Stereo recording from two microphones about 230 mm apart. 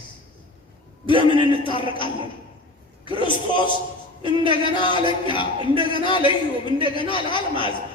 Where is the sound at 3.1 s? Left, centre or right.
Left.